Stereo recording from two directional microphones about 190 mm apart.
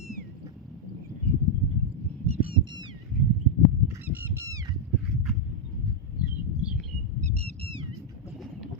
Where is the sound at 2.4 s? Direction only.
25° right (ahead or behind).